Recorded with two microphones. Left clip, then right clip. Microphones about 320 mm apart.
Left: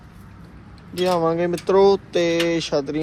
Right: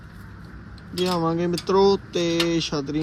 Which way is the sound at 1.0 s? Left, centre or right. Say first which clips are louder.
Left 4 dB; centre.